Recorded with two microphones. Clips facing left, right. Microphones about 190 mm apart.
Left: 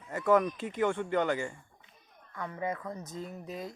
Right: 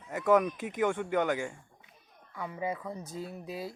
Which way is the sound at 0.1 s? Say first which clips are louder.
Right 1 dB; 10° right (ahead or behind).